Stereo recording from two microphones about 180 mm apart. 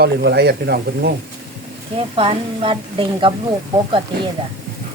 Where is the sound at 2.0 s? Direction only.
30° right (ahead or behind).